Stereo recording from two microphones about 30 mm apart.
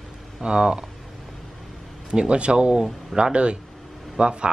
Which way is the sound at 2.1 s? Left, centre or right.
Right.